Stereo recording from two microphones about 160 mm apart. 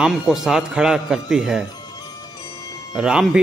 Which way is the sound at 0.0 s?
5° right (ahead or behind).